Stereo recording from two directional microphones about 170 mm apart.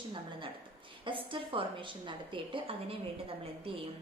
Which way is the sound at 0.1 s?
30° right (ahead or behind).